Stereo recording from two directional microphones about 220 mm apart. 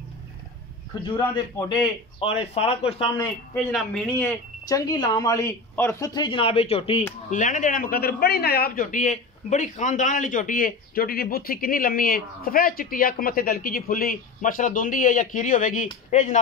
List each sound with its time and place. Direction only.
1.1 s speech: 20° left (ahead or behind)
3.5 s speech: 5° left (ahead or behind)
4.6 s a man's voice: 15° left (ahead or behind); by 16.3 s 35° left (ahead or behind)